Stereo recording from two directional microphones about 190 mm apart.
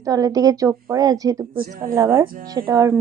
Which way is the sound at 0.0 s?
20° right (ahead or behind).